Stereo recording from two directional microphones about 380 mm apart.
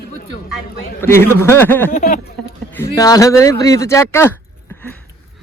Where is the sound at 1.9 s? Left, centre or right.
Left.